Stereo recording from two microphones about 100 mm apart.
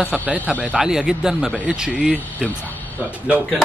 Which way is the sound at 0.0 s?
15° left (ahead or behind).